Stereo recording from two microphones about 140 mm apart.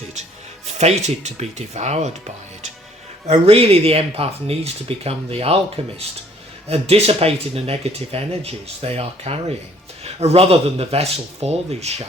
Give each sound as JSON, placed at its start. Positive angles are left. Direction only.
{"t": 0.8, "sound": "speech", "side_deg": -50}
{"t": 3.2, "sound": "speech", "side_deg": -45}